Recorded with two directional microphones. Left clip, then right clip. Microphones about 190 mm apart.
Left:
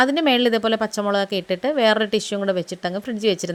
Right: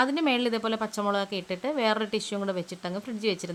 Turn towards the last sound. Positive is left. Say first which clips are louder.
# left 8 dB
turn(degrees=25)  # may be behind; listen again after turning